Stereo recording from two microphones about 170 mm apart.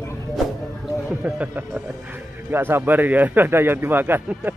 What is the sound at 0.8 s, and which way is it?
Speech, 5° right (ahead or behind).